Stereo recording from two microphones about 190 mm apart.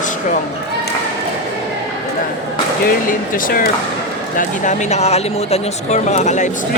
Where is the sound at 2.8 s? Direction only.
45° left (ahead or behind).